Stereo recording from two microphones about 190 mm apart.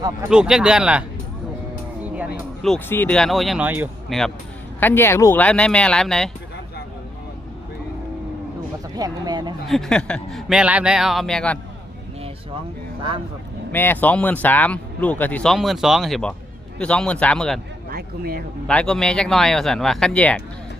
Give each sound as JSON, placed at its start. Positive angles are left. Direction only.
{"t": 0.3, "sound": "speech", "side_deg": -5}
{"t": 2.1, "sound": "speech", "side_deg": 0}
{"t": 4.8, "sound": "speech", "side_deg": 10}
{"t": 9.0, "sound": "speech", "side_deg": -20}
{"t": 9.6, "sound": "speech", "side_deg": 0}
{"t": 13.7, "sound": "speech", "side_deg": 10}
{"t": 17.9, "sound": "a sound", "side_deg": -50}
{"t": 18.7, "sound": "speech", "side_deg": 5}